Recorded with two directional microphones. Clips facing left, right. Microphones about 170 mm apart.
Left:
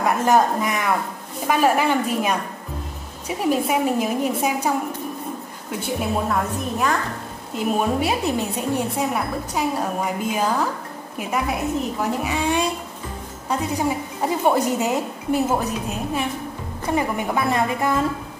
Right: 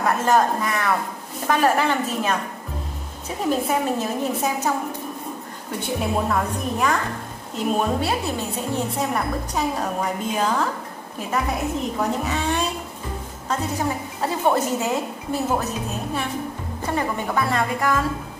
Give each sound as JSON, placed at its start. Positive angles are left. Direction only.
{"t": 0.0, "sound": "speech", "side_deg": 15}
{"t": 5.7, "sound": "a woman's voice", "side_deg": 0}
{"t": 12.0, "sound": "speech", "side_deg": 10}
{"t": 16.9, "sound": "speech", "side_deg": 15}